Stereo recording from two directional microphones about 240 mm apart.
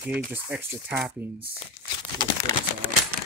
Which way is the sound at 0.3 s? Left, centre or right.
Centre.